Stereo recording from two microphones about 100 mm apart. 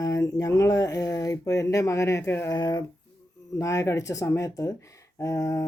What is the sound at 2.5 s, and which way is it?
Speech, 45° left (ahead or behind).